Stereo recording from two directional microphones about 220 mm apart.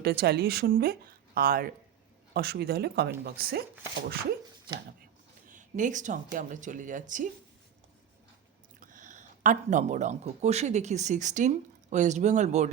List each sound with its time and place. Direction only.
0.0 s speech: 45° right (ahead or behind)
5.5 s speech: 35° right (ahead or behind)
8.8 s speech: 35° right (ahead or behind)